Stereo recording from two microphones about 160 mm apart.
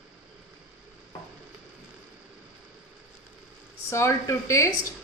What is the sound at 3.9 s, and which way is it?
Speech, 20° left (ahead or behind).